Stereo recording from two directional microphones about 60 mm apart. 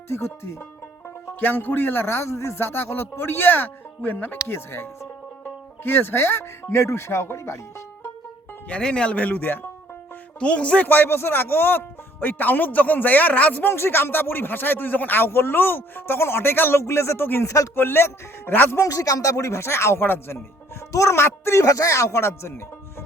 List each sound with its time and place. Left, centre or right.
0.1 s speech: left
1.4 s speech: left
8.7 s speech: centre; by 9.6 s left
10.4 s speech: centre
10.8 s speech: left
13.7 s speech: left
17.4 s speech: left
17.7 s speech: left
18.8 s speech: left
20.9 s speech: left
21.6 s speech: left